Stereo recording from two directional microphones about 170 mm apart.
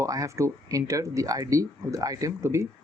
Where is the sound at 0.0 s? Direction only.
20° right (ahead or behind).